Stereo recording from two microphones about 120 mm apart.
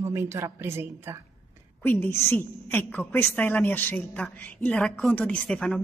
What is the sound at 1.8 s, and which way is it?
A woman's voice, 20° left (ahead or behind).